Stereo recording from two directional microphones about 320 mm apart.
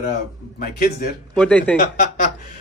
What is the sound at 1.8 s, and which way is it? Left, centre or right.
Speech, left.